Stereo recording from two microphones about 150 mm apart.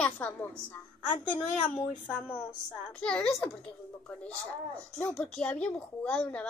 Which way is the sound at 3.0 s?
5° left (ahead or behind).